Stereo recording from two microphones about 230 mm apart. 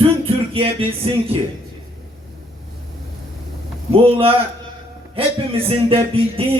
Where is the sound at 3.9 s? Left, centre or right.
Right.